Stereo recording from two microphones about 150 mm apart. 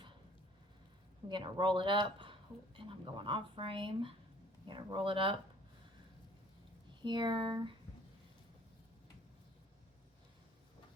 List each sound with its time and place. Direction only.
1.3 s speech: 30° right (ahead or behind)
7.0 s speech: 30° right (ahead or behind)